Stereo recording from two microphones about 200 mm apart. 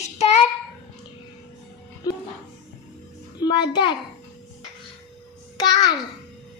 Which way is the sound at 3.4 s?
20° left (ahead or behind).